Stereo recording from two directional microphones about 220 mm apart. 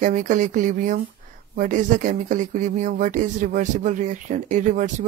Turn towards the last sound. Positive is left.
turn(degrees=-35)  # may be behind; listen again after turning